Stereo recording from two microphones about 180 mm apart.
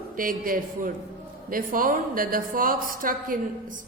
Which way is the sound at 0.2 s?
50° right (ahead or behind).